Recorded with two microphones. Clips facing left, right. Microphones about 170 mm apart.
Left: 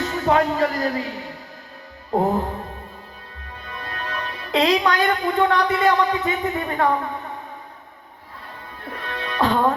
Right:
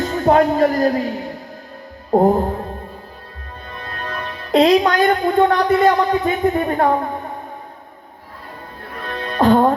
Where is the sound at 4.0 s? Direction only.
35° right (ahead or behind).